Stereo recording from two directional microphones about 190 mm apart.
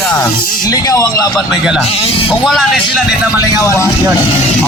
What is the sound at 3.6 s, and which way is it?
Speech, 15° left (ahead or behind).